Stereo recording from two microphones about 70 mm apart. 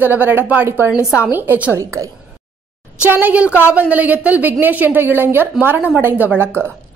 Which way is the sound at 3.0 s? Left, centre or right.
Right.